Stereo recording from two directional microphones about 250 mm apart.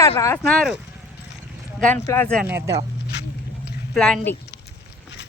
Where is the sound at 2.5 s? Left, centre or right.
Centre.